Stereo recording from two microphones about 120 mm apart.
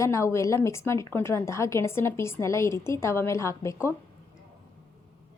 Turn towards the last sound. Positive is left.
turn(degrees=25)  # may be behind; listen again after turning